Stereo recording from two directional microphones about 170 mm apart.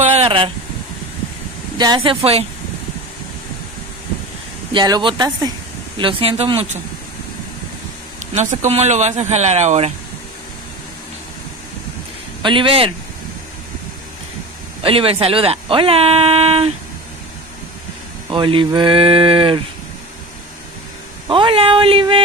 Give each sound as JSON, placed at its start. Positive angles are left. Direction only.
{"t": 0.0, "sound": "a sound", "side_deg": -35}
{"t": 1.8, "sound": "speech", "side_deg": -25}
{"t": 4.7, "sound": "speech", "side_deg": -25}
{"t": 8.4, "sound": "speech", "side_deg": -40}
{"t": 12.4, "sound": "speech", "side_deg": -30}
{"t": 14.8, "sound": "speech", "side_deg": -30}
{"t": 18.3, "sound": "speech", "side_deg": -30}
{"t": 21.3, "sound": "speech", "side_deg": -30}